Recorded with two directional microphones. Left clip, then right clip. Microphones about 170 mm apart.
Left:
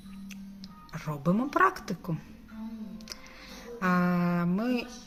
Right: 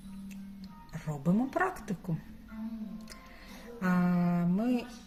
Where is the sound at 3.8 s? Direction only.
15° right (ahead or behind).